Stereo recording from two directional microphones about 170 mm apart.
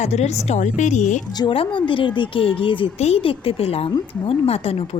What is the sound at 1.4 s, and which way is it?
A woman's voice, 30° left (ahead or behind).